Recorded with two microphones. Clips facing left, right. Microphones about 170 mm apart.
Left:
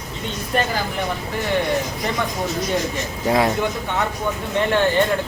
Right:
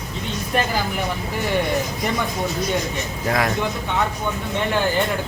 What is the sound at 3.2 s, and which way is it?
Speech, 25° left (ahead or behind).